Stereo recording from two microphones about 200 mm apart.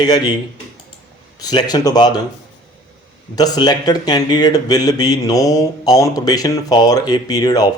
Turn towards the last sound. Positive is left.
turn(degrees=20)  # may be behind; listen again after turning